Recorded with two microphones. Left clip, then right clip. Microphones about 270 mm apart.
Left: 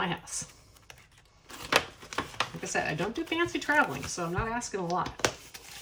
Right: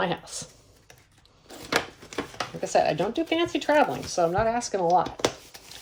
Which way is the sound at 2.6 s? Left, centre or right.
Centre.